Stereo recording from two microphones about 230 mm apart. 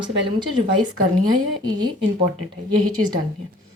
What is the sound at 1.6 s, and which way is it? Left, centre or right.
Speech, centre.